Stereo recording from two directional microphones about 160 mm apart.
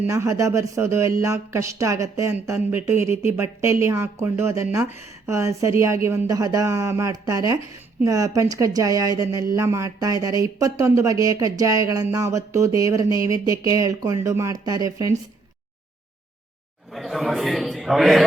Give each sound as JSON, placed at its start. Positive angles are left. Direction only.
{"t": 0.1, "sound": "a woman's voice", "side_deg": -20}
{"t": 16.9, "sound": "a man's voice", "side_deg": 0}